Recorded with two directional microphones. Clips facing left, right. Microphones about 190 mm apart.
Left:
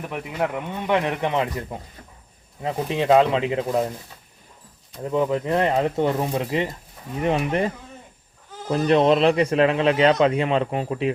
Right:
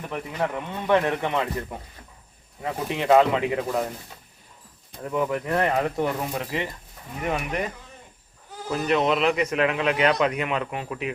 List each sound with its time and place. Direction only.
0.1 s speech: 10° left (ahead or behind); by 3.8 s 25° left (ahead or behind)
5.0 s speech: 25° left (ahead or behind)
8.7 s speech: 35° left (ahead or behind)